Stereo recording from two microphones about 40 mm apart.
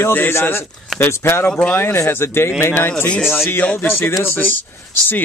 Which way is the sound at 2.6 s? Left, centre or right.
Left.